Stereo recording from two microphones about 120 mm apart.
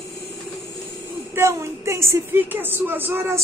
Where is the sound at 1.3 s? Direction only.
20° right (ahead or behind).